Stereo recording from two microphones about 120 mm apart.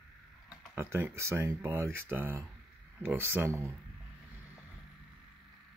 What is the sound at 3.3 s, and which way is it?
Speech, 25° right (ahead or behind).